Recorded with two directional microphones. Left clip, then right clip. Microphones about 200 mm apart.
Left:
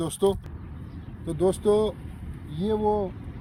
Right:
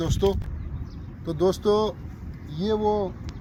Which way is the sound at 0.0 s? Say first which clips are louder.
Even; centre (ahead or behind).